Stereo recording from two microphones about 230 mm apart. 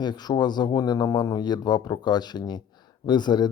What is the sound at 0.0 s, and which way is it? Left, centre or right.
Speech, centre.